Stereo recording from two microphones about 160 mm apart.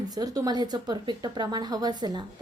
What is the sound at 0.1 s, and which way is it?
Speech, 25° right (ahead or behind).